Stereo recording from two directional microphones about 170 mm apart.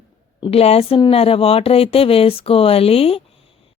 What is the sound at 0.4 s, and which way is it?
Speech, 35° left (ahead or behind).